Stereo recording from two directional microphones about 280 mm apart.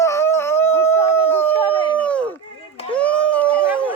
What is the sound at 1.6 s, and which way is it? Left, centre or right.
Howl, centre.